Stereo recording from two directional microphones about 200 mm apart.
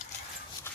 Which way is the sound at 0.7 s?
10° left (ahead or behind).